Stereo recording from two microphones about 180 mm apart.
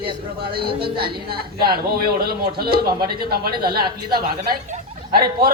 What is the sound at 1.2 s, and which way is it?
A woman's voice, 60° right (ahead or behind).